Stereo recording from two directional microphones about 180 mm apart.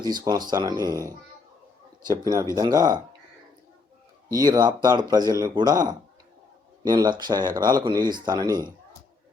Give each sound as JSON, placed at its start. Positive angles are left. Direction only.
{"t": 0.0, "sound": "speech", "side_deg": -25}
{"t": 2.0, "sound": "speech", "side_deg": -20}
{"t": 4.4, "sound": "speech", "side_deg": -20}
{"t": 6.8, "sound": "speech", "side_deg": -25}